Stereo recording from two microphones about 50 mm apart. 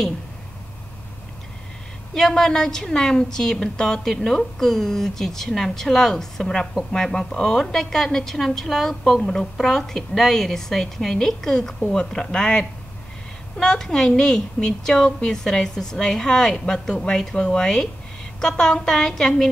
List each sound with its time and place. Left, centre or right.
2.1 s a woman's voice: centre